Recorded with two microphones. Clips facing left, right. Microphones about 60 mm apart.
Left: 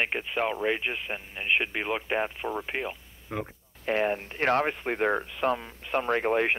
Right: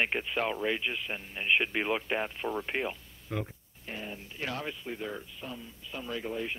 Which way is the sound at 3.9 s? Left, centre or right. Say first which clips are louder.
Left 14 dB; left.